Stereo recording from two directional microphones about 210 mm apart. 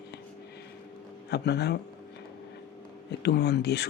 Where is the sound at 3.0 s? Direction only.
50° left (ahead or behind).